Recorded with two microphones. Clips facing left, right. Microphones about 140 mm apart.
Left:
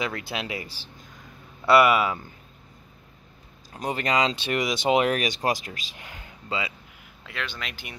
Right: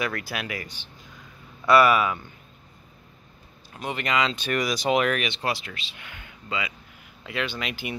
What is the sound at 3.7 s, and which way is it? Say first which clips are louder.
Speech: left 2 dB; 35° left (ahead or behind).